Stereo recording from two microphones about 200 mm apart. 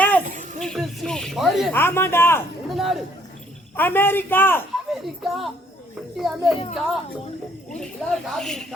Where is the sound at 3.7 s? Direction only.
10° left (ahead or behind).